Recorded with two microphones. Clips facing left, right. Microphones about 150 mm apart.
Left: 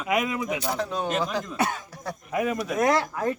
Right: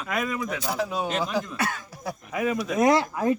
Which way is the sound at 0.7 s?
5° right (ahead or behind).